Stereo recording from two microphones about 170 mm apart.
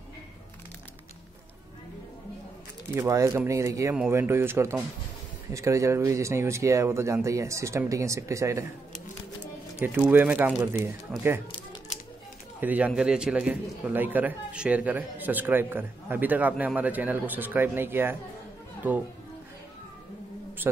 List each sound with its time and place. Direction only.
2.9 s a man's voice: 15° right (ahead or behind)
9.9 s a man's voice: 10° right (ahead or behind)
12.5 s a man's voice: 10° right (ahead or behind)